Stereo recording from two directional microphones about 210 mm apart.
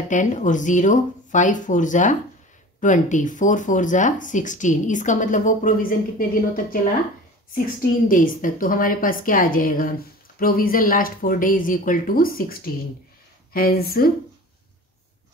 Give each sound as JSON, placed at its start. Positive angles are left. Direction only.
{"t": 0.1, "sound": "speech", "side_deg": 35}
{"t": 8.1, "sound": "speech", "side_deg": 40}